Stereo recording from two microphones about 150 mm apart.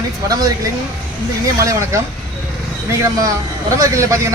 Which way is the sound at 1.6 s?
20° right (ahead or behind).